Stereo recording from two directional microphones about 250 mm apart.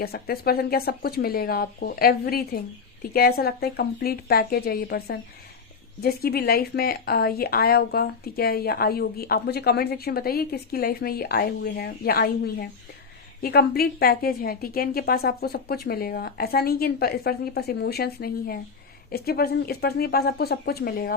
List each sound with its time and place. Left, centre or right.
0.0 s speech: left